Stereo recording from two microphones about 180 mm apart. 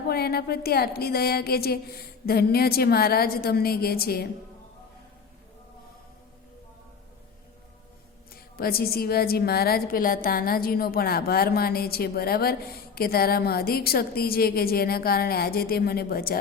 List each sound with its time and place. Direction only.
0.1 s a woman's voice: 60° left (ahead or behind)
8.3 s a woman's voice: 55° left (ahead or behind)